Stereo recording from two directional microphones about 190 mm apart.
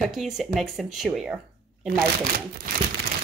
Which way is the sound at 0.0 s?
Centre (ahead or behind).